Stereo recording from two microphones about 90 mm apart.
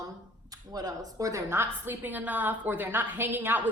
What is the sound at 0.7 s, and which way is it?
A woman's voice, 45° right (ahead or behind).